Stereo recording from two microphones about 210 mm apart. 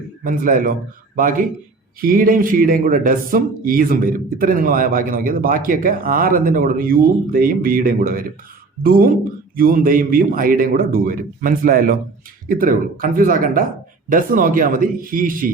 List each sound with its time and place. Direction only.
0.3 s a man's voice: 40° right (ahead or behind)